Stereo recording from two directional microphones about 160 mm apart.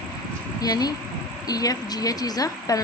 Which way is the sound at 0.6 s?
25° left (ahead or behind).